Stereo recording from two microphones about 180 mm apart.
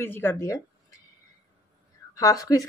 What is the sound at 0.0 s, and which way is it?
Speech, 10° left (ahead or behind).